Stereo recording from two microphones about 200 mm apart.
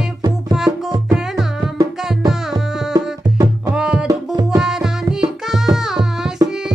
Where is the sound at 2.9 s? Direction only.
15° right (ahead or behind).